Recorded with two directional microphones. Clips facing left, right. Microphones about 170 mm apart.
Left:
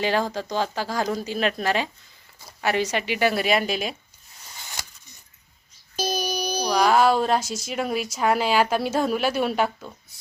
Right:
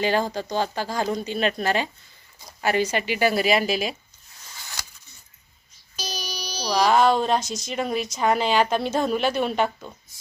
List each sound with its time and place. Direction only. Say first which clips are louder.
0.0 s speech: right 1 dB; centre (ahead or behind)
6.0 s a sound: left 8 dB; 50° left (ahead or behind)
6.7 s speech: even; 5° left (ahead or behind)